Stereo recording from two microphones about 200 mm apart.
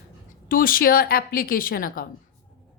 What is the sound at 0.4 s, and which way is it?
A woman's voice, 45° left (ahead or behind).